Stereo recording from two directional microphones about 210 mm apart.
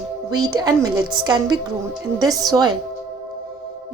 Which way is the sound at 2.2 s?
15° right (ahead or behind).